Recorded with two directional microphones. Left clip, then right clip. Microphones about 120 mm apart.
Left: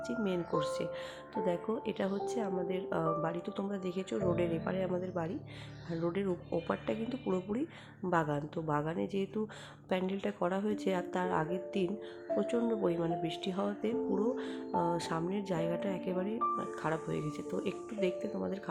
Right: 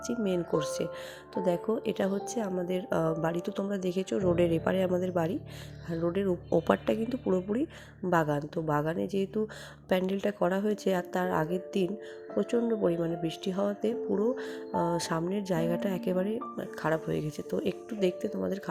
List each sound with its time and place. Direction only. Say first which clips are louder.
0.1 s speech: right 6 dB; 40° right (ahead or behind)
5.9 s speech: right 5 dB; 30° right (ahead or behind)
6.7 s speech: right 8 dB; 45° right (ahead or behind)
7.3 s speech: right 6 dB; 30° right (ahead or behind)